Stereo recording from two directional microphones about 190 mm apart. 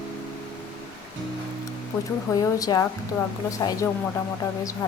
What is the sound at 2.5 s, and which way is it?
A woman's voice, 20° left (ahead or behind).